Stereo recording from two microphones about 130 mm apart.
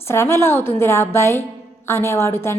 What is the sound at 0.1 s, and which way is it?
A woman's voice, 20° left (ahead or behind).